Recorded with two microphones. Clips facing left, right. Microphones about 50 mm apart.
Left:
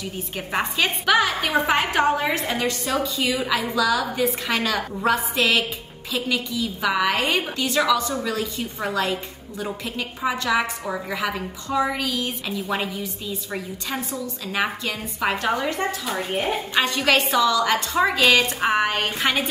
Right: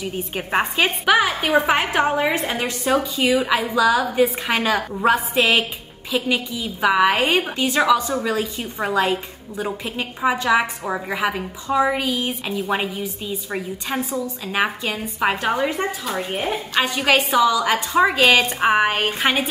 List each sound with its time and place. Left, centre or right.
0.0 s a woman's voice: right